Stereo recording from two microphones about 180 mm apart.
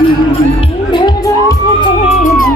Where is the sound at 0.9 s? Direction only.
25° left (ahead or behind).